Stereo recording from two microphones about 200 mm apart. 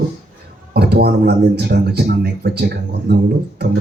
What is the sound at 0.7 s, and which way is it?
Speech, 50° right (ahead or behind).